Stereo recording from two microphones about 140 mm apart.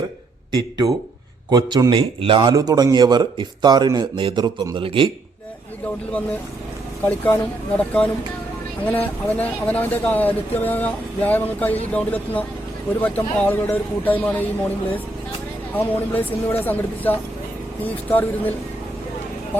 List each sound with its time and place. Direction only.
0.5 s speech: 30° right (ahead or behind)
7.8 s speech: 10° left (ahead or behind)
15.7 s speech: 15° left (ahead or behind)